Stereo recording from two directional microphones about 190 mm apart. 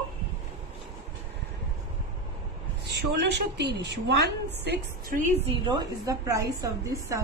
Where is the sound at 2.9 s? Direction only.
60° right (ahead or behind).